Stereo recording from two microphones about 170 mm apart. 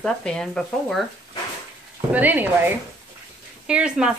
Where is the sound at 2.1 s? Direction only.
10° right (ahead or behind).